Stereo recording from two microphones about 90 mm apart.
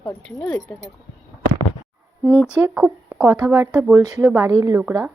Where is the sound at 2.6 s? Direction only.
20° right (ahead or behind).